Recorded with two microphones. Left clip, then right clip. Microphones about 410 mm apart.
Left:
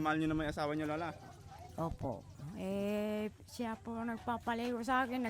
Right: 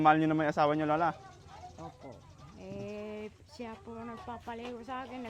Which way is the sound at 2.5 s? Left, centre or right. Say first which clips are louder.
Left 5 dB; left.